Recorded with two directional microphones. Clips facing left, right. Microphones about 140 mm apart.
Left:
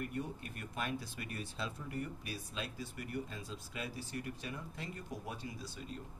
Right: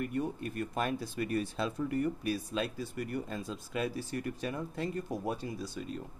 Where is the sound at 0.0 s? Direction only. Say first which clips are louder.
Right 7 dB; 55° right (ahead or behind).